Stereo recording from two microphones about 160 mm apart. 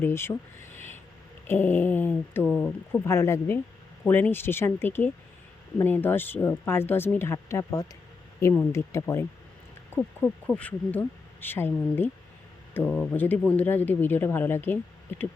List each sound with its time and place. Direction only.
0.0 s speech: 15° left (ahead or behind)
2.5 s speech: centre (ahead or behind)
3.1 s speech: 15° left (ahead or behind)